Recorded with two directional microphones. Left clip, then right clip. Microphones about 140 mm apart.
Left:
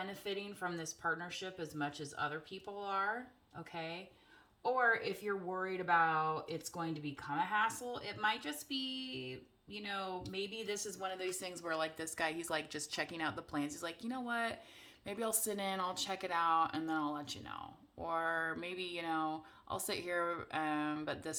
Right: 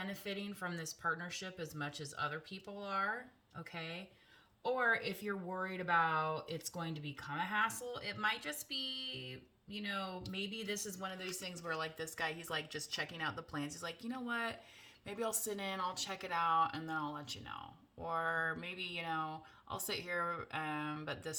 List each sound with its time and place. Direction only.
0.0 s speech: 20° left (ahead or behind)